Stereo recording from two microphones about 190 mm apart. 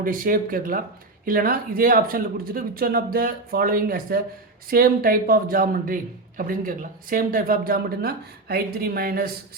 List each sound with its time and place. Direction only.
0.0 s a man's voice: 45° right (ahead or behind)